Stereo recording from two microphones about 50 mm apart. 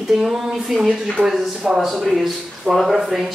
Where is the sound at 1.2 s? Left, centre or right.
Right.